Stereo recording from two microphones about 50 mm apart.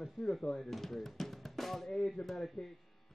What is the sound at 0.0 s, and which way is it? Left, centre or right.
Speech, centre.